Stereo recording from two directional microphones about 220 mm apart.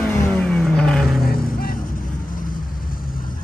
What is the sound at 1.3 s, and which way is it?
Vehicle, 40° left (ahead or behind).